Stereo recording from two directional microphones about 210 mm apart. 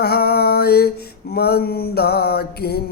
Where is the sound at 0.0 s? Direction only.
50° left (ahead or behind).